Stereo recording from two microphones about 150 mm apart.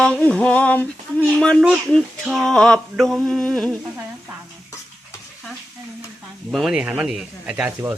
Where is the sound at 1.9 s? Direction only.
Centre (ahead or behind).